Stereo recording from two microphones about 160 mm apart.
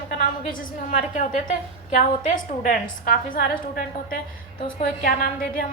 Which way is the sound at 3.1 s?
70° left (ahead or behind).